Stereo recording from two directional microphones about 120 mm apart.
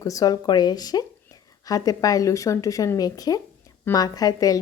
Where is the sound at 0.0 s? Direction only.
30° left (ahead or behind).